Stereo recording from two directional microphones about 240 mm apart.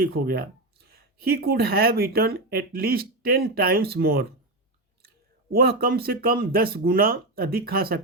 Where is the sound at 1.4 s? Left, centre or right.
Right.